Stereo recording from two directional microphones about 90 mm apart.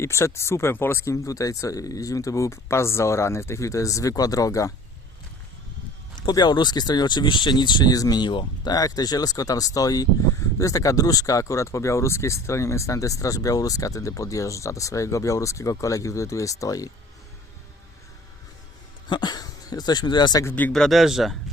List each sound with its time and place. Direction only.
0.0 s speech: 30° left (ahead or behind)
6.1 s speech: 50° left (ahead or behind)
8.7 s speech: 45° left (ahead or behind)
19.0 s speech: 55° left (ahead or behind)
20.7 s speech: 5° left (ahead or behind)